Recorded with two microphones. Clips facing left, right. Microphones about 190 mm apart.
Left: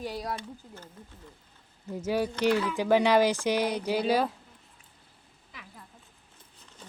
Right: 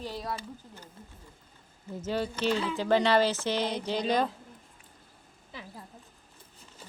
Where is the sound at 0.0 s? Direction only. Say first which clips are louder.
Left 2 dB; 10° left (ahead or behind).